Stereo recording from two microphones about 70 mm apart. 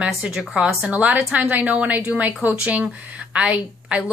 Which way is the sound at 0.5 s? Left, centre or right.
Centre.